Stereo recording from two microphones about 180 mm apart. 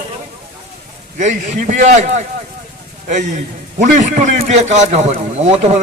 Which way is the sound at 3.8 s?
40° right (ahead or behind).